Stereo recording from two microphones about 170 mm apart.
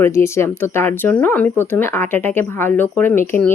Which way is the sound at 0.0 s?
15° left (ahead or behind).